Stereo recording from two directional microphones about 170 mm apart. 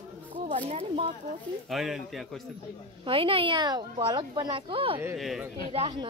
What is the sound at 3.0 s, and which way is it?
Speech, 30° right (ahead or behind).